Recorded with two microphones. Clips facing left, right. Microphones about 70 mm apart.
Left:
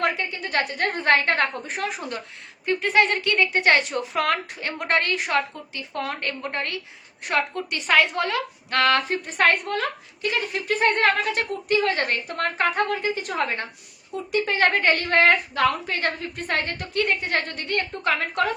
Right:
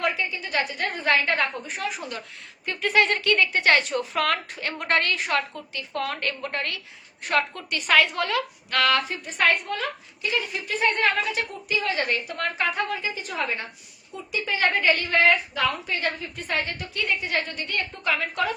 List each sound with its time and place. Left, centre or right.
0.0 s a woman's voice: left
2.6 s a woman's voice: left